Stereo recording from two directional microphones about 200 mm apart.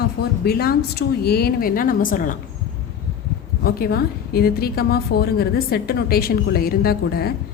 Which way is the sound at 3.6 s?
50° left (ahead or behind).